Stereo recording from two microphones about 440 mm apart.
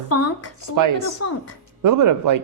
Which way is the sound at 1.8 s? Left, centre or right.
Right.